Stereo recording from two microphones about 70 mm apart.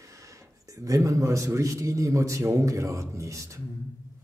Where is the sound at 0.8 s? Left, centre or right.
Right.